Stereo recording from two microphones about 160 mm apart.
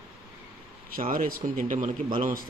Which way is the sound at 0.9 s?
60° right (ahead or behind).